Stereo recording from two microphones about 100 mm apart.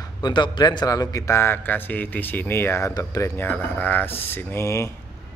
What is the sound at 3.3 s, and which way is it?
A man's voice, 20° left (ahead or behind).